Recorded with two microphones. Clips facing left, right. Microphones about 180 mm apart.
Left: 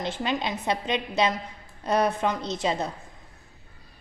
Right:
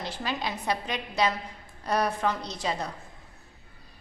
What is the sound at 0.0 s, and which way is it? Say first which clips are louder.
A woman's voice: left 4 dB; 20° left (ahead or behind).